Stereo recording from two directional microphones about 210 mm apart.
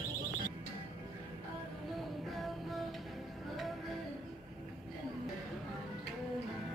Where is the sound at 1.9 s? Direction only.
Centre (ahead or behind).